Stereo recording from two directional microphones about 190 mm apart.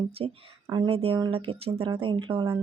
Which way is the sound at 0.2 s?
30° right (ahead or behind).